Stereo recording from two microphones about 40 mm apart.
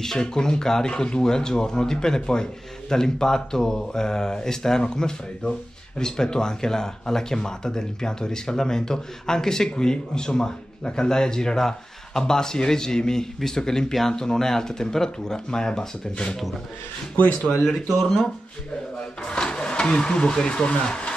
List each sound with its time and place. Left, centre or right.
0.0 s speech: centre
17.2 s speech: left
17.6 s speech: centre
19.3 s speech: left